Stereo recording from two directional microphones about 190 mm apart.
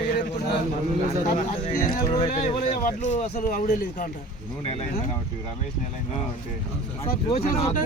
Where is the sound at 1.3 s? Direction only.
40° left (ahead or behind).